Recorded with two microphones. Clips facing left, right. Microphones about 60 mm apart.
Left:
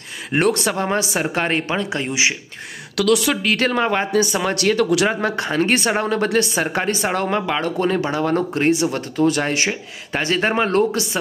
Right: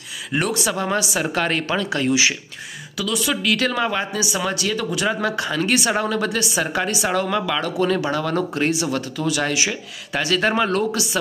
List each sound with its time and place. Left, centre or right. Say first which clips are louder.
0.3 s speech: left 4 dB; left
0.8 s speech: left 1 dB; left
3.0 s speech: left 6 dB; left
3.4 s speech: left 1 dB; left
5.2 s speech: left 2 dB; left